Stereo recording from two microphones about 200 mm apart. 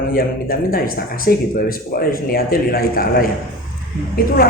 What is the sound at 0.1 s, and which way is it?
A woman's voice, 45° left (ahead or behind).